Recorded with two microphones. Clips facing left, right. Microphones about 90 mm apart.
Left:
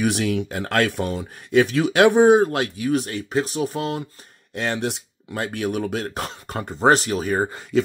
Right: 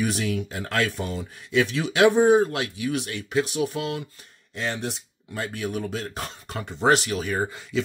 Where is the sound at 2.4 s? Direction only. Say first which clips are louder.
Left 4 dB; 45° left (ahead or behind).